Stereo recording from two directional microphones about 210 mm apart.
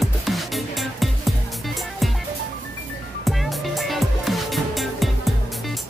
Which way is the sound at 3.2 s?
Centre (ahead or behind).